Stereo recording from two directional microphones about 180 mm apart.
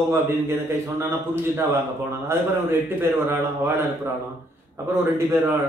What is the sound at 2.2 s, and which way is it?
Speech, 10° right (ahead or behind).